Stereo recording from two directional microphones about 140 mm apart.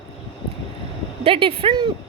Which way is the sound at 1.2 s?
40° right (ahead or behind).